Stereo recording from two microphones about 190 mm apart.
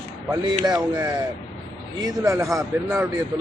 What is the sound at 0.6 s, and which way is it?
A man's voice, 20° right (ahead or behind).